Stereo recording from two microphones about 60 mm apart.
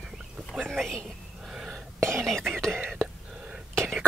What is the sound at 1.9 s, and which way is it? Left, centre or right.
Whispering, right.